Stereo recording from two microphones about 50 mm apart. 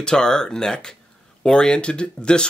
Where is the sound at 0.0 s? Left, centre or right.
Centre.